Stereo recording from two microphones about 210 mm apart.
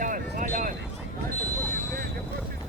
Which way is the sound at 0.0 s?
40° right (ahead or behind).